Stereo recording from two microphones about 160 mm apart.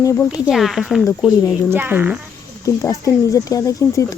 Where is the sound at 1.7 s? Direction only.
15° right (ahead or behind).